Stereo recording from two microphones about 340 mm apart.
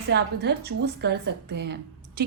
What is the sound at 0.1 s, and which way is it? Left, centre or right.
A woman's voice, right.